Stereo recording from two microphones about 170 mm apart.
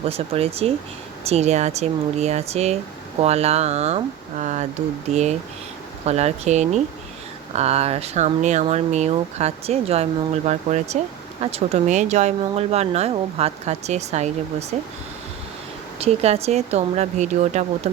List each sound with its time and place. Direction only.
0.1 s speech: 35° right (ahead or behind)
16.0 s speech: 40° right (ahead or behind)